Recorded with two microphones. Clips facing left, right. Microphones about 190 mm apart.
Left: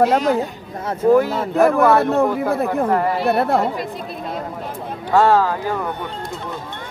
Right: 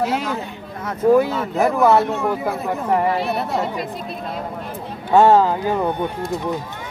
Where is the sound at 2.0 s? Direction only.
55° left (ahead or behind).